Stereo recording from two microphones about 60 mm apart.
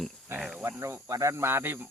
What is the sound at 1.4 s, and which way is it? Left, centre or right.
Speech, right.